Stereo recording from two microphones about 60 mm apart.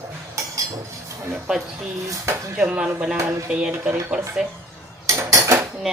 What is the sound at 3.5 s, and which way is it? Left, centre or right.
Speech, centre.